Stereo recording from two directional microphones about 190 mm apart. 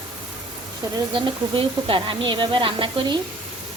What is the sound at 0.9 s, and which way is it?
Speech, 25° right (ahead or behind).